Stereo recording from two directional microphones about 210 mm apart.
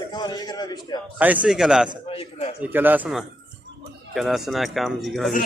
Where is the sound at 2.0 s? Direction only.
25° left (ahead or behind).